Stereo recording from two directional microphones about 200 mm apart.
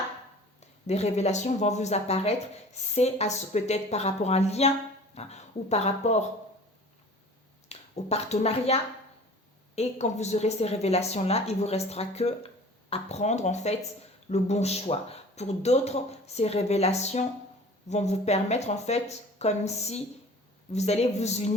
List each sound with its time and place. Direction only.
0.9 s speech: 35° left (ahead or behind)
7.7 s speech: 30° left (ahead or behind)